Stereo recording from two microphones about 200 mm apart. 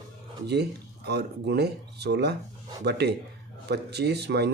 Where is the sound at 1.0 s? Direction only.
55° right (ahead or behind).